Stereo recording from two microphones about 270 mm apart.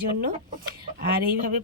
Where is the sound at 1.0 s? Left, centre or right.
Right.